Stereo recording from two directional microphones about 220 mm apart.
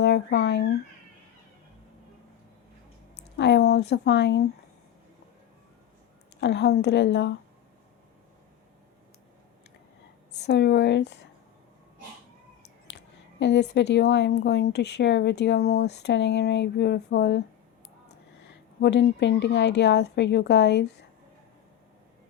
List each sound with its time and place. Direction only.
0.0 s speech: 50° left (ahead or behind)
3.3 s speech: 50° left (ahead or behind)
6.4 s speech: 50° left (ahead or behind)
10.4 s speech: 50° left (ahead or behind)
13.4 s speech: 50° left (ahead or behind)
18.4 s speech: 50° left (ahead or behind)